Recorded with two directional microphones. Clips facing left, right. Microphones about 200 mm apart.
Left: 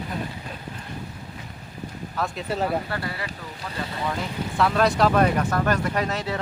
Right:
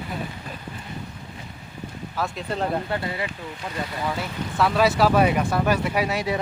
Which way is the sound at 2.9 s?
20° right (ahead or behind).